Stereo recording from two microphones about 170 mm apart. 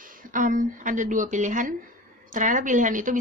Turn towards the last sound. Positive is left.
turn(degrees=-50)  # may be behind; listen again after turning